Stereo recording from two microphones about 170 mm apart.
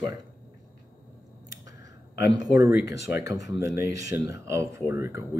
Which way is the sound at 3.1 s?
15° right (ahead or behind).